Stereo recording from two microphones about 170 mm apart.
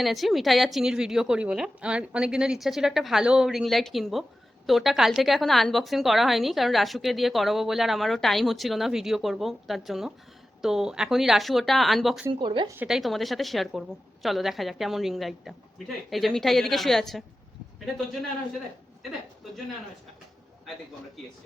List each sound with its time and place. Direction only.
0.0 s a woman's voice: centre (ahead or behind)
12.3 s speech: 30° right (ahead or behind)
12.7 s a woman's voice: 5° right (ahead or behind)